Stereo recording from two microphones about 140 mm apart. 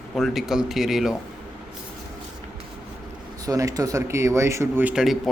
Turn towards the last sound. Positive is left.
turn(degrees=-5)  # may be behind; listen again after turning